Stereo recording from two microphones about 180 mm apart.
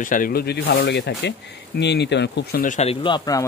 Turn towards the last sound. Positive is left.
turn(degrees=20)  # may be behind; listen again after turning